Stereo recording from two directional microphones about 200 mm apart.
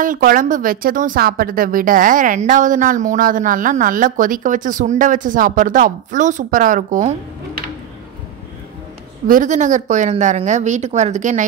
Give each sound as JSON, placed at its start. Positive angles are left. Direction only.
{"t": 0.0, "sound": "a woman's voice", "side_deg": -45}
{"t": 9.3, "sound": "a woman's voice", "side_deg": -40}